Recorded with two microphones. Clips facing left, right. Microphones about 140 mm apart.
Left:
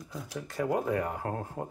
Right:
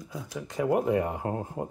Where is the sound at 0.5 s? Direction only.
20° right (ahead or behind).